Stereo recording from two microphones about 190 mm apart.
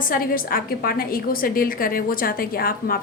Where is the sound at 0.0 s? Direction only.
50° left (ahead or behind).